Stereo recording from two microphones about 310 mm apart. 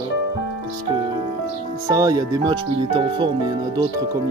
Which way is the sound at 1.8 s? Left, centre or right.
Centre.